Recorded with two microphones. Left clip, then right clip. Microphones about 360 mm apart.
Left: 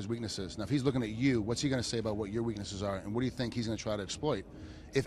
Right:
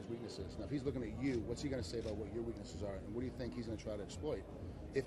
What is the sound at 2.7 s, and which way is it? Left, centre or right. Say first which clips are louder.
Speech: left 9 dB; left.